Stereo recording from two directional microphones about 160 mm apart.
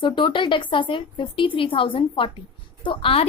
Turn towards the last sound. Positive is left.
turn(degrees=35)  # may be behind; listen again after turning